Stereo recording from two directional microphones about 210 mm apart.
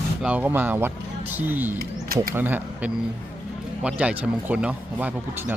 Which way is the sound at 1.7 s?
45° right (ahead or behind).